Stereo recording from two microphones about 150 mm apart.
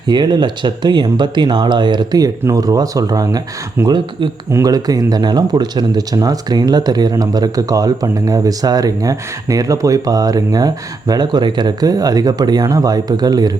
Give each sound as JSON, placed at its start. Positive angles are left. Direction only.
{"t": 0.1, "sound": "speech", "side_deg": -30}